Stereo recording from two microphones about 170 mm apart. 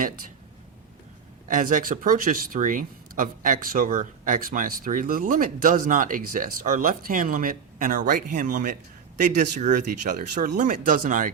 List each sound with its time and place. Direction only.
1.5 s speech: 50° right (ahead or behind)